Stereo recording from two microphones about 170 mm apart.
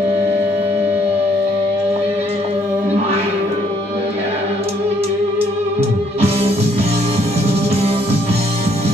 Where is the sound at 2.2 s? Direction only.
35° right (ahead or behind).